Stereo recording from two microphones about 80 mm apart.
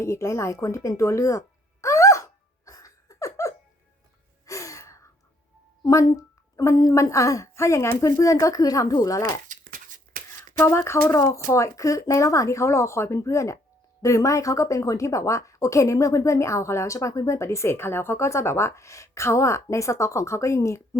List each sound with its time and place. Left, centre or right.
0.0 s a sound: left
4.4 s gasp: left
6.1 s a sound: left
6.9 s a woman's voice: left
10.6 s a woman's voice: left
11.1 s a woman's voice: left